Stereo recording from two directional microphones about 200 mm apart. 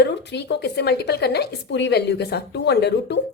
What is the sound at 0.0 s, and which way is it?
A woman's voice, 60° left (ahead or behind).